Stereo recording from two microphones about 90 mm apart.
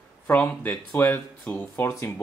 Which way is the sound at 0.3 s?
15° left (ahead or behind).